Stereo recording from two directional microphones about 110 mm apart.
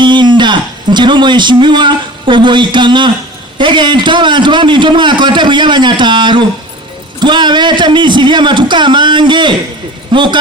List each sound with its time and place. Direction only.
0.0 s a man's voice: 45° right (ahead or behind)